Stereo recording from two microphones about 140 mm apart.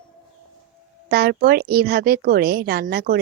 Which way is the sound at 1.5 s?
90° right.